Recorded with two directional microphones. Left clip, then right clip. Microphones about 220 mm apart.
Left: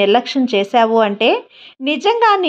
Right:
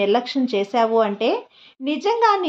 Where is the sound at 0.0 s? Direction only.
25° left (ahead or behind).